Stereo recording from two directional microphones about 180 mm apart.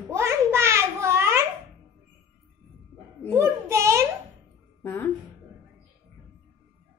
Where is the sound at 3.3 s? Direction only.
15° right (ahead or behind).